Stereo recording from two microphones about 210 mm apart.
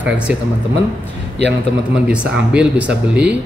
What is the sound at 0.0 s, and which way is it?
Speech, 5° right (ahead or behind).